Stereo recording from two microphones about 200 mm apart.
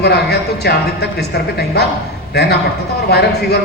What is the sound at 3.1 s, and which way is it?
Speech, 55° left (ahead or behind).